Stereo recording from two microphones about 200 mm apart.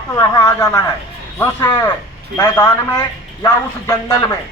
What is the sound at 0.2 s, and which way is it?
A man's voice, 15° left (ahead or behind).